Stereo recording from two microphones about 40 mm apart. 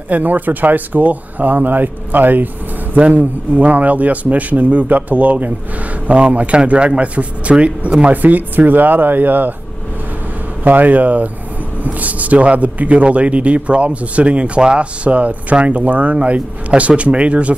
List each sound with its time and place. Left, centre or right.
0.1 s speech: right
3.0 s a man's voice: right
8.1 s speech: right
10.6 s a man's voice: right